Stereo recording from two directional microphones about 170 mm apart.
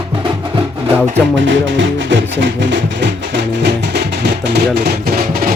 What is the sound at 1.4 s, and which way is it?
Music, 90° right.